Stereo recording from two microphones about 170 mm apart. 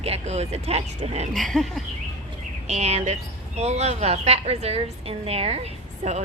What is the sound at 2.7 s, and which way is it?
A woman's voice, 40° right (ahead or behind).